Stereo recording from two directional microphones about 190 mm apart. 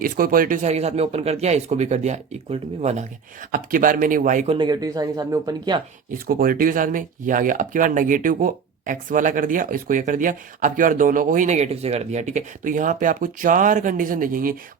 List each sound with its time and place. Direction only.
0.0 s speech: 50° right (ahead or behind)
4.5 s speech: 20° right (ahead or behind)
6.2 s speech: 50° right (ahead or behind)